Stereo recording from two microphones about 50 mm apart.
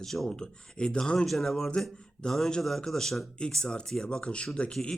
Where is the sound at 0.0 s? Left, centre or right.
Centre.